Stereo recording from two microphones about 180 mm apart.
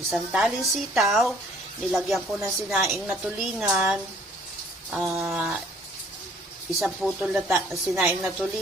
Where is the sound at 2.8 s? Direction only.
10° right (ahead or behind).